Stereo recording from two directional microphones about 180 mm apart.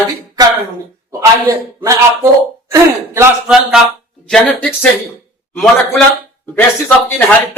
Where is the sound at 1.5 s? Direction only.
15° right (ahead or behind).